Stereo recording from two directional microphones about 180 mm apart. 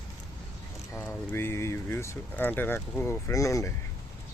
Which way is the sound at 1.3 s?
15° left (ahead or behind).